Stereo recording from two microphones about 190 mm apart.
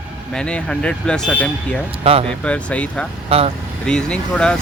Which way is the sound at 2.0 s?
30° right (ahead or behind).